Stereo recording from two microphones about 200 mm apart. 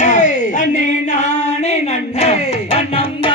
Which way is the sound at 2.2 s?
30° left (ahead or behind).